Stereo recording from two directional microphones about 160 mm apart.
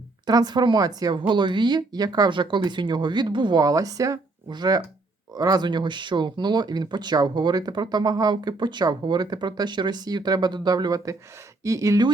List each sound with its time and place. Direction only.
0.3 s speech: 25° right (ahead or behind)